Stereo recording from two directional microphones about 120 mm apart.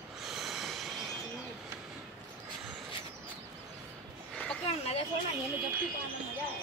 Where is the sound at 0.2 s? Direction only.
Centre (ahead or behind).